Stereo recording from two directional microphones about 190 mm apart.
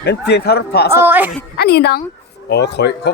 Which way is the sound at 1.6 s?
55° left (ahead or behind).